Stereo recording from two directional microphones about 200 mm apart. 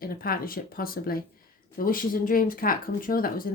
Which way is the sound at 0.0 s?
45° left (ahead or behind).